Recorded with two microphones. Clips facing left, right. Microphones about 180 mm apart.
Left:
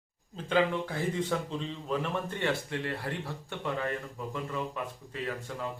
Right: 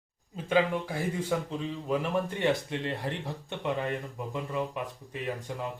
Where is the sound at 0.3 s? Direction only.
10° right (ahead or behind).